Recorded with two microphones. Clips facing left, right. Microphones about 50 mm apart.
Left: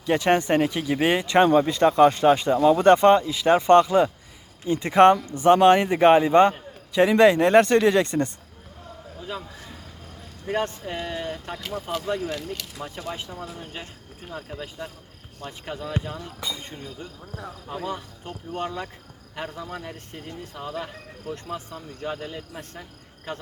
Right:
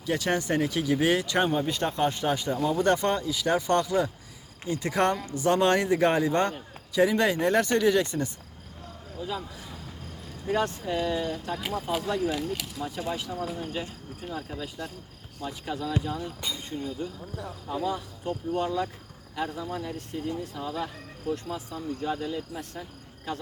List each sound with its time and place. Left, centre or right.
0.1 s speech: left
1.4 s speech: left
2.6 s speech: left
2.8 s speech: left
5.9 s a man's voice: left
7.0 s speech: left
10.5 s speech: left
11.6 s speech: centre
13.1 s speech: left
15.4 s speech: left
17.3 s speech: left